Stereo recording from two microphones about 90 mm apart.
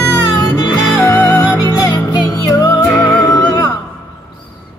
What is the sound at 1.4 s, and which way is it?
Music, 45° left (ahead or behind).